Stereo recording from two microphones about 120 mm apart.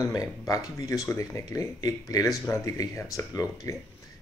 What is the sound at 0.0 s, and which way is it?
Speech, 30° left (ahead or behind).